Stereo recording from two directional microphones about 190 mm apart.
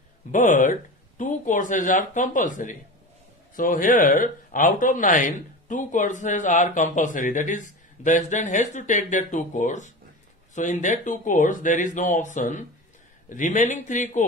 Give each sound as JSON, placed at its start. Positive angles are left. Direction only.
{"t": 0.3, "sound": "speech", "side_deg": 45}